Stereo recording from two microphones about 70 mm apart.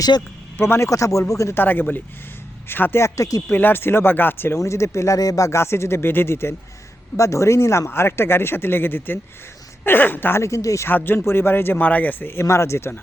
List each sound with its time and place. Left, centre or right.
0.5 s speech: left
0.9 s speech: left
1.5 s speech: left
3.0 s speech: left
3.5 s speech: left
5.5 s speech: left
10.4 s speech: left
10.8 s speech: left